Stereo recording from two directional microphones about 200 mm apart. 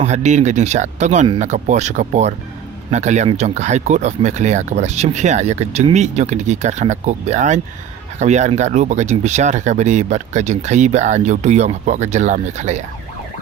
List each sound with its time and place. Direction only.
0.0 s speech: 35° right (ahead or behind)